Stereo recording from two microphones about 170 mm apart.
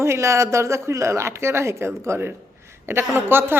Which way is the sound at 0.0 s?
15° right (ahead or behind).